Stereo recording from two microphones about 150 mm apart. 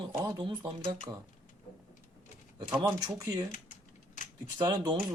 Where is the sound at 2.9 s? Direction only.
25° right (ahead or behind).